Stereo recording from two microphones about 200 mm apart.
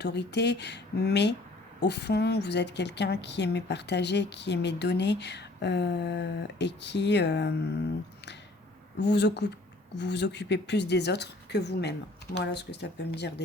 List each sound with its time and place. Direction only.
0.0 s a woman's voice: 60° left (ahead or behind)
9.0 s a woman's voice: 60° left (ahead or behind)